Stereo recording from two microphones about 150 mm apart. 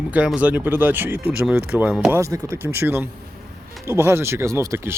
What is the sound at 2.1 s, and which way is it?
Speech, 20° right (ahead or behind).